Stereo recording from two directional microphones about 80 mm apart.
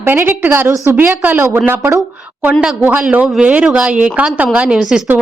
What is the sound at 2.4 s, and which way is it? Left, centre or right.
A woman's voice, centre.